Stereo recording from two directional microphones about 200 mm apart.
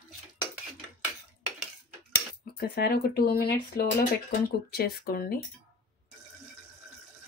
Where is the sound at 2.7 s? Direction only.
50° left (ahead or behind).